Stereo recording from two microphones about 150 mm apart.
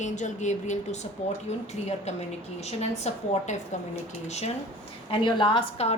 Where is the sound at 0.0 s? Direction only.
50° left (ahead or behind).